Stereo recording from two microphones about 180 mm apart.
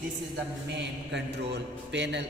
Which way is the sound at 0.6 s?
75° right (ahead or behind).